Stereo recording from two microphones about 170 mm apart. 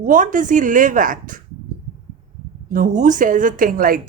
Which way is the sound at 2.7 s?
50° right (ahead or behind).